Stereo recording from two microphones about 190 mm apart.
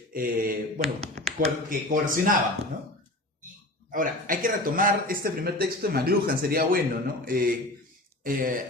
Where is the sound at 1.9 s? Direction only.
45° right (ahead or behind).